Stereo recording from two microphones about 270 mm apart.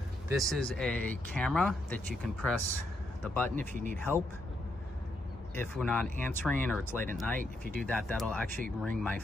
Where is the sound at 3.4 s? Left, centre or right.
Right.